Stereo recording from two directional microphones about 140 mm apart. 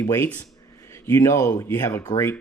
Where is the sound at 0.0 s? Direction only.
15° left (ahead or behind).